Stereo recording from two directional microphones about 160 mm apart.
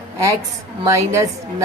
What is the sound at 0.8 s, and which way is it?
Speech, 20° right (ahead or behind).